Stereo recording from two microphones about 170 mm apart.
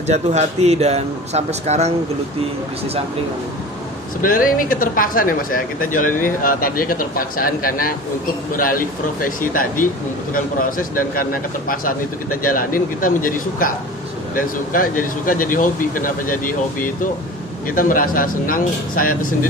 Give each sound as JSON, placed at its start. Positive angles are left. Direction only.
{"t": 0.1, "sound": "speech", "side_deg": -40}
{"t": 4.2, "sound": "speech", "side_deg": 55}